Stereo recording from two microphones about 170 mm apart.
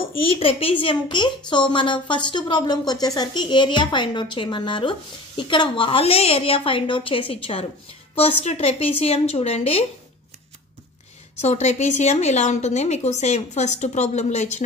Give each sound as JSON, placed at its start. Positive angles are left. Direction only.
{"t": 0.2, "sound": "a woman's voice", "side_deg": 30}
{"t": 11.4, "sound": "a woman's voice", "side_deg": 40}